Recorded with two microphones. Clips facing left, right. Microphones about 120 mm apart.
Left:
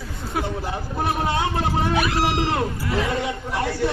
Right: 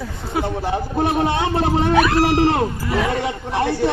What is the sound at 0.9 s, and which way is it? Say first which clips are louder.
Speech: right 4 dB; 25° right (ahead or behind).